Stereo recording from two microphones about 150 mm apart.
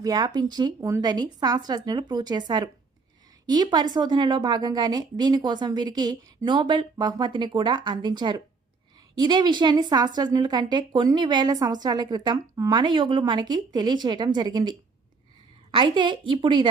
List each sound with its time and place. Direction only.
0.0 s a woman's voice: 25° right (ahead or behind)